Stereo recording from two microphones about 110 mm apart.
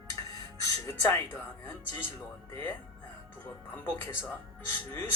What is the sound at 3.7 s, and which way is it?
Speech, 20° left (ahead or behind).